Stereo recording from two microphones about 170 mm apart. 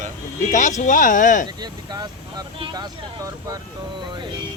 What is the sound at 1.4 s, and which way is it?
Speech, 25° right (ahead or behind).